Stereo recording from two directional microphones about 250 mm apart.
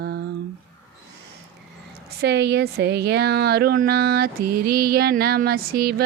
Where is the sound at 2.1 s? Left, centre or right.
Right.